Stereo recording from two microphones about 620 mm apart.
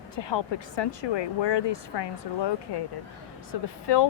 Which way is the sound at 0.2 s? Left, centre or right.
Left.